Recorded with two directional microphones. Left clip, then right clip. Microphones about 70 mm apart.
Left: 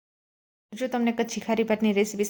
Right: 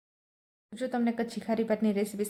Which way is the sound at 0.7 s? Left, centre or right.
Left.